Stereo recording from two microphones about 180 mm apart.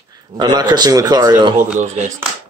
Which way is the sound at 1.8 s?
45° right (ahead or behind).